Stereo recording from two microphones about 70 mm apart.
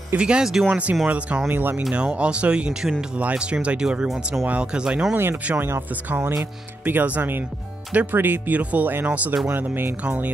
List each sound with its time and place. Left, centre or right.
0.2 s speech: centre
0.7 s speech: centre
1.9 s speech: centre
5.1 s speech: right